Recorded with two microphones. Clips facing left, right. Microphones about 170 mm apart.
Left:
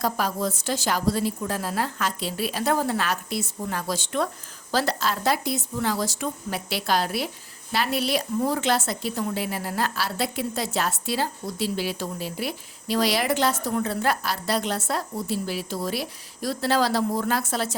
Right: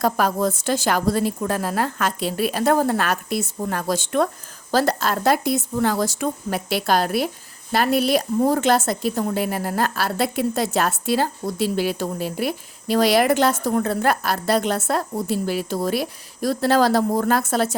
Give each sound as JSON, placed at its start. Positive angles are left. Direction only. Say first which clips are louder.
{"t": 0.0, "sound": "a woman's voice", "louder": "right 6 dB", "side_deg": -55}